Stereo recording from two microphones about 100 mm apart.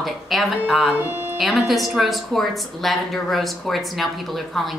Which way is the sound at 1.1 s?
25° right (ahead or behind).